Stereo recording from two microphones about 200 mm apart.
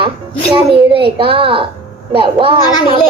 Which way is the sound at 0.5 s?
25° right (ahead or behind).